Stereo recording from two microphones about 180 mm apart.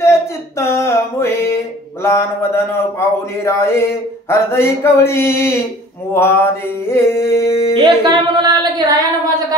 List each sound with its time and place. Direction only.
0.0 s a sound: 15° left (ahead or behind)
2.0 s speech: 15° left (ahead or behind)
6.1 s mantra: 10° left (ahead or behind)
7.7 s singing: 25° right (ahead or behind)